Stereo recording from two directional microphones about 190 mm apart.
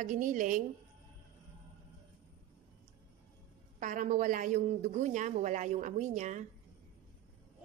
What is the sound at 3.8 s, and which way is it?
Speech, 40° right (ahead or behind).